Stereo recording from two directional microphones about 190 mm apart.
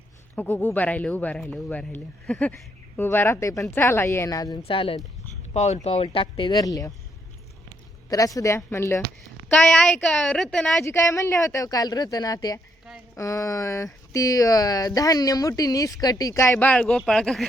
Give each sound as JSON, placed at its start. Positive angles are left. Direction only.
{"t": 0.3, "sound": "speech", "side_deg": 10}
{"t": 8.1, "sound": "speech", "side_deg": 20}
{"t": 9.2, "sound": "a woman's voice", "side_deg": 0}
{"t": 10.8, "sound": "a woman's voice", "side_deg": 15}